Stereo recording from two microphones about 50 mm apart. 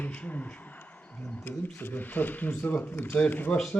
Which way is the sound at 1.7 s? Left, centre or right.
Left.